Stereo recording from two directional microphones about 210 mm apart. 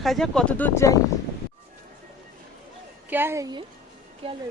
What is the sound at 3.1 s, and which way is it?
Speech, 10° right (ahead or behind).